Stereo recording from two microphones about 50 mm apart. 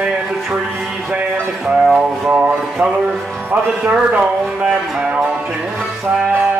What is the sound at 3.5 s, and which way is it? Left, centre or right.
Speech, right.